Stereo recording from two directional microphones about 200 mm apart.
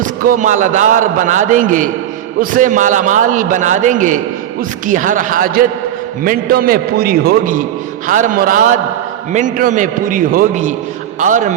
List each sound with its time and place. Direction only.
0.0 s a man's voice: 45° right (ahead or behind)